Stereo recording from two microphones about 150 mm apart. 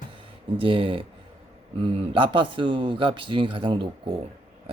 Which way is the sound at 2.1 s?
35° right (ahead or behind).